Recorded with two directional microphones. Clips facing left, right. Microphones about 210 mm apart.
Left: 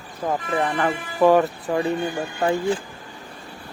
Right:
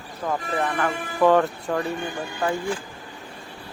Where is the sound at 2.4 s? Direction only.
25° left (ahead or behind).